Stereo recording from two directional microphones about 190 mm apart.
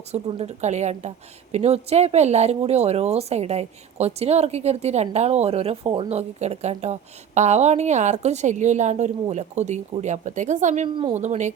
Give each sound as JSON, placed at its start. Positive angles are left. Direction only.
{"t": 0.1, "sound": "speech", "side_deg": -35}
{"t": 10.8, "sound": "a woman's voice", "side_deg": -25}
{"t": 11.1, "sound": "speech", "side_deg": -40}